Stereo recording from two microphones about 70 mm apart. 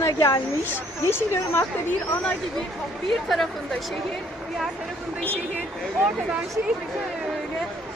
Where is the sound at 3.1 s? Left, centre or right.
Centre.